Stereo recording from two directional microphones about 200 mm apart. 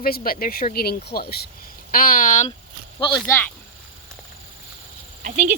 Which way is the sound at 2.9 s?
25° left (ahead or behind).